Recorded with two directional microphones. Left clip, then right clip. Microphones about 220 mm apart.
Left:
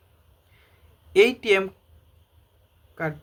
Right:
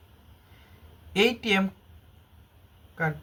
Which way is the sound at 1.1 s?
40° left (ahead or behind).